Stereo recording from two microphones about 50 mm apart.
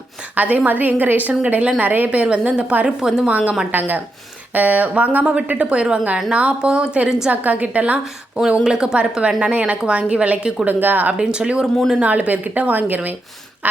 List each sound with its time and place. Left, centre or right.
0.3 s a woman's voice: right
2.0 s a woman's voice: right
3.2 s a woman's voice: right
8.6 s a woman's voice: centre
10.7 s a woman's voice: right
11.2 s a woman's voice: centre; by 13.1 s right